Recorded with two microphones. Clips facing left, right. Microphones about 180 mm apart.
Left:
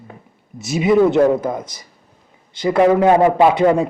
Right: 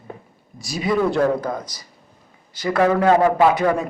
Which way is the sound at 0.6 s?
20° left (ahead or behind).